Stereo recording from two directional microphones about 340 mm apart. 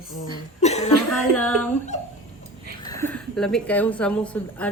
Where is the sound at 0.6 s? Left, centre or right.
Centre.